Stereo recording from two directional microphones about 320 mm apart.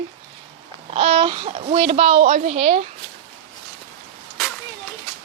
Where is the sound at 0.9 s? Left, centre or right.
Centre.